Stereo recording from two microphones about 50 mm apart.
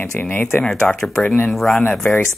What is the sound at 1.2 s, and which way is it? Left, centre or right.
Speech, left.